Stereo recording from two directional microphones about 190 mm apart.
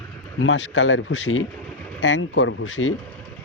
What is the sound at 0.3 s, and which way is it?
Speech, 85° left.